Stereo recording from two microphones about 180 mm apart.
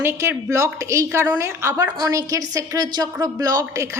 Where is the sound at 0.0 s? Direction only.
15° right (ahead or behind).